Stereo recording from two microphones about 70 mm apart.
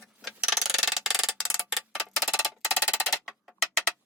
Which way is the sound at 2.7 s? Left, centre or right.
Centre.